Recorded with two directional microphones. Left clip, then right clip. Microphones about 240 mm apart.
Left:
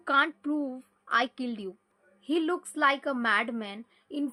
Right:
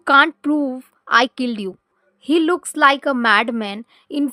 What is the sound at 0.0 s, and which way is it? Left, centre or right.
A woman's voice, right.